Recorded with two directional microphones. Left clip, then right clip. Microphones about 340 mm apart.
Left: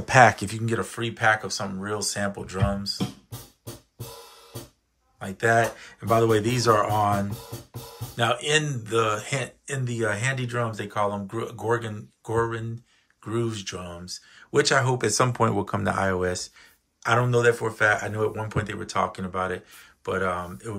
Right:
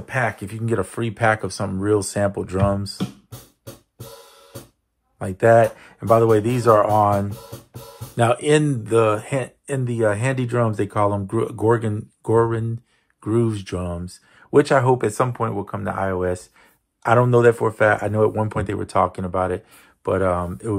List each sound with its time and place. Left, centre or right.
0.0 s speech: centre
5.2 s speech: centre